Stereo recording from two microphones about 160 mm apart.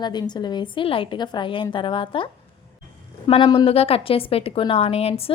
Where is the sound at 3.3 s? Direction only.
35° left (ahead or behind).